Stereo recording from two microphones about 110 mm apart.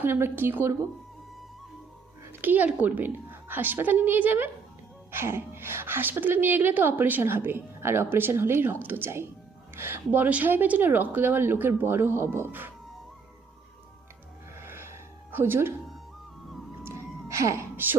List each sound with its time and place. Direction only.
0.0 s a woman's voice: 20° right (ahead or behind)
2.4 s a woman's voice: 15° right (ahead or behind)
14.5 s music: 20° right (ahead or behind)
15.3 s speech: 20° right (ahead or behind)
16.8 s music: 25° right (ahead or behind)